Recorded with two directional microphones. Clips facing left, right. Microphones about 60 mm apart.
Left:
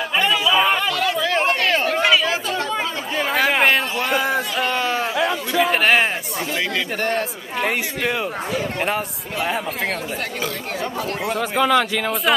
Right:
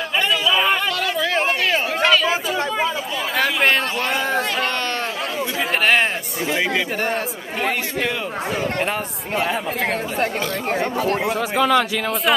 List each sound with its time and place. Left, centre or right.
0.2 s chatter: centre
3.6 s a sound: centre
7.0 s a man's voice: centre
8.7 s speech: centre
10.8 s speech: right
11.2 s speech: centre